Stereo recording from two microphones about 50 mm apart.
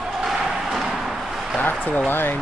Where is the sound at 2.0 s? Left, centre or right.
Left.